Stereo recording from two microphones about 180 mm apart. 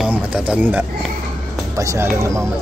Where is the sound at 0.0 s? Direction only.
5° right (ahead or behind).